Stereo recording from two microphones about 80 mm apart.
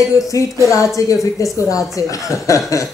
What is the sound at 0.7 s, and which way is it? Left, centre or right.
Speech, left.